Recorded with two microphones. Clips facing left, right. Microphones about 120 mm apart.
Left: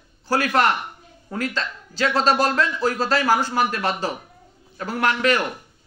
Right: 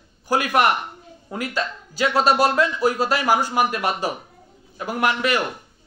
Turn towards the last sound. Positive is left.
turn(degrees=-10)  # may be behind; listen again after turning